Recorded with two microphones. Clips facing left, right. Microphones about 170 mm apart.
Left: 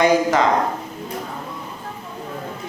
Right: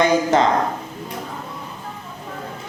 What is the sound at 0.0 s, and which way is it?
Speech, 25° right (ahead or behind).